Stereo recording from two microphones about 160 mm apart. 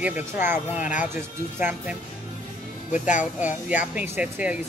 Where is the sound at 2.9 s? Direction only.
50° left (ahead or behind).